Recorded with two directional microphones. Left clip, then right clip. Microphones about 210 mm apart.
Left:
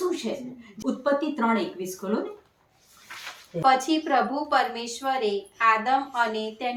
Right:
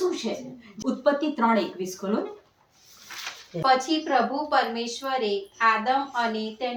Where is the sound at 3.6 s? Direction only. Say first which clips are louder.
Left 1 dB; 45° left (ahead or behind).